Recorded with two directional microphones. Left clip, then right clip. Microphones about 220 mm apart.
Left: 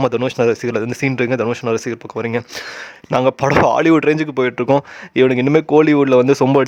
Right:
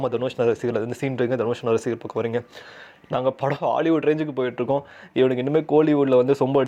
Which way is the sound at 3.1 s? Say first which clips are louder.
Left 8 dB; 30° left (ahead or behind).